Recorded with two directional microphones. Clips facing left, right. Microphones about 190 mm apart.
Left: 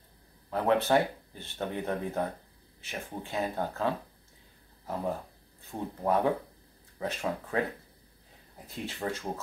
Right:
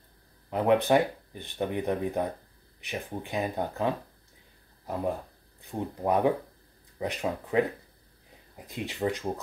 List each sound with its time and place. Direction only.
0.5 s speech: 15° right (ahead or behind)
5.6 s speech: 15° right (ahead or behind)
8.6 s speech: 15° right (ahead or behind)